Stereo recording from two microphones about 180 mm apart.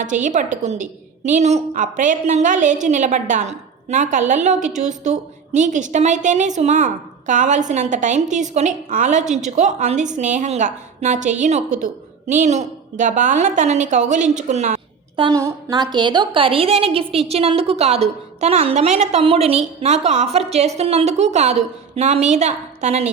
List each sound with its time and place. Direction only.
0.0 s a woman's voice: 45° right (ahead or behind)
15.1 s a woman's voice: 25° right (ahead or behind)